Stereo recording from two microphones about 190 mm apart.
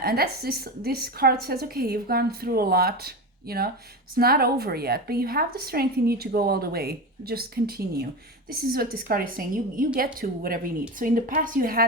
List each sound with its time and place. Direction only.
0.0 s a woman's voice: 55° right (ahead or behind)